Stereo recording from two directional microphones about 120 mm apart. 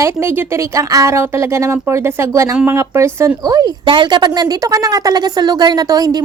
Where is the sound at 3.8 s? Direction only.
40° right (ahead or behind).